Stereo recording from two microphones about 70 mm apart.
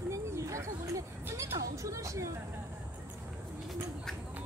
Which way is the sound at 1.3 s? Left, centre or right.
Right.